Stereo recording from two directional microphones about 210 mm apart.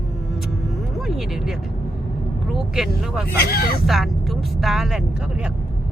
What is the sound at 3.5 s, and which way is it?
Speech, 45° left (ahead or behind).